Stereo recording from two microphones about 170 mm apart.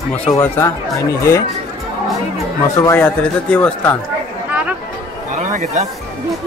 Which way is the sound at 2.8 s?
15° left (ahead or behind).